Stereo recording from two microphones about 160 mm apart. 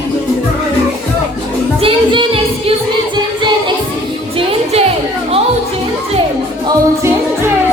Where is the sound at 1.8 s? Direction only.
35° right (ahead or behind).